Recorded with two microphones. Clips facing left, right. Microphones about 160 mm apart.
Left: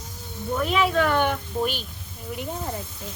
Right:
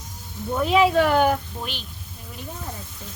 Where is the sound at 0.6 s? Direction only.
30° right (ahead or behind).